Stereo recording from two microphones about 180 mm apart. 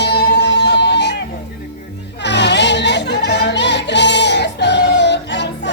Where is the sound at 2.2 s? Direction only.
75° left (ahead or behind).